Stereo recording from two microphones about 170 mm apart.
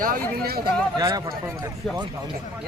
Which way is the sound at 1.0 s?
20° right (ahead or behind).